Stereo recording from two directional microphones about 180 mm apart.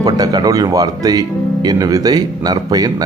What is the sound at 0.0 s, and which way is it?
Speech, 20° right (ahead or behind).